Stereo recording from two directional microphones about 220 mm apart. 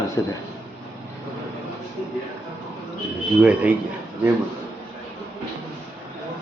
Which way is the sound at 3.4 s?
5° right (ahead or behind).